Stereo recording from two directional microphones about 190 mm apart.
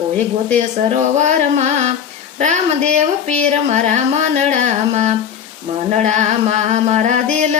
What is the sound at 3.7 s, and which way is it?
A woman's voice, 40° right (ahead or behind).